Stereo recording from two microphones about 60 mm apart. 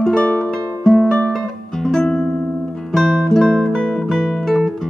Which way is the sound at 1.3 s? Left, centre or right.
Centre.